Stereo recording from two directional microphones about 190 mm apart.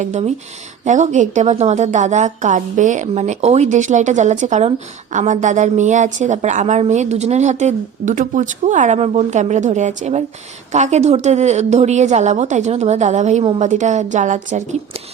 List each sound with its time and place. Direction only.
0.0 s a woman's voice: 35° right (ahead or behind)